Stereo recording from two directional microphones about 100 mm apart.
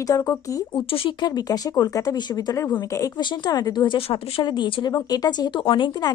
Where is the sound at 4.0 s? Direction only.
75° left (ahead or behind).